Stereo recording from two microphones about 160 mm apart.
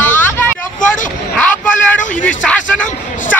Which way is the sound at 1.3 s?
10° left (ahead or behind).